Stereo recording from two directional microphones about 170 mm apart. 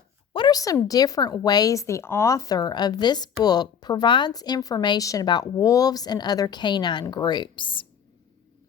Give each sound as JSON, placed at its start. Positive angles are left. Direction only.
{"t": 0.3, "sound": "speech", "side_deg": 25}